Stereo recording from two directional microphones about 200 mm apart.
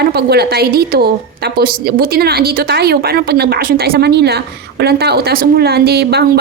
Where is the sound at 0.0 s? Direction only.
50° right (ahead or behind).